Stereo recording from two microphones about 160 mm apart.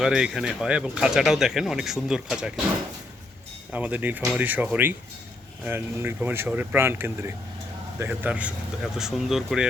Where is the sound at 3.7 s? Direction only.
10° right (ahead or behind).